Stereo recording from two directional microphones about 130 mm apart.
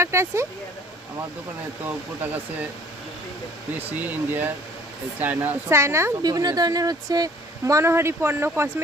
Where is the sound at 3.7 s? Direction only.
15° right (ahead or behind).